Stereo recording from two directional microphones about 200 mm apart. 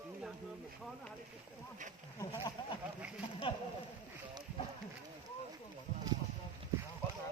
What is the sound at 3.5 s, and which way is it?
Speech, 25° left (ahead or behind).